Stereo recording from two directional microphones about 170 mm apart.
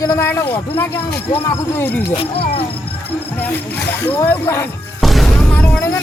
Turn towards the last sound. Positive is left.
turn(degrees=10)  # may be behind; listen again after turning